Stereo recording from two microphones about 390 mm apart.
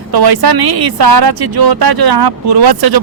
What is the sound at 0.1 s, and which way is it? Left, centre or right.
A man's voice, right.